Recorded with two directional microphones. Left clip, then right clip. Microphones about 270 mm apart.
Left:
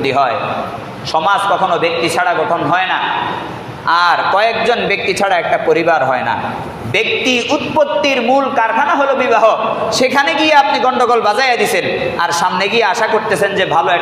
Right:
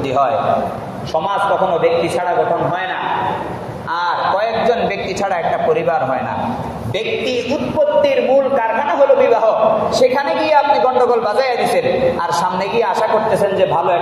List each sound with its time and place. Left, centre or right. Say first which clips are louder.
3.9 s a man's voice: left 5 dB; left
8.0 s a man's voice: even; left
9.9 s a man's voice: left 2 dB; left
13.4 s a man's voice: left 2 dB; left